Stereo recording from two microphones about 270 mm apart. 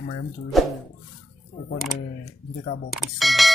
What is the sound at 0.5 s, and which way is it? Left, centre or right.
Speech, centre.